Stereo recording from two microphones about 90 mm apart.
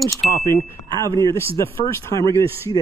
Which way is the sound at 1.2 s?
30° left (ahead or behind).